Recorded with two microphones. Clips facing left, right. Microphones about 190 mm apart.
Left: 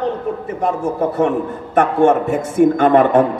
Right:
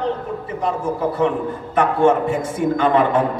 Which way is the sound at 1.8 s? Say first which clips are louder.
Left 3 dB; 45° left (ahead or behind).